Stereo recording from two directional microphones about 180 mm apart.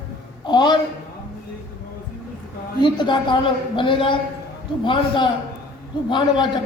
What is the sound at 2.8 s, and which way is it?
A man's voice, 25° left (ahead or behind).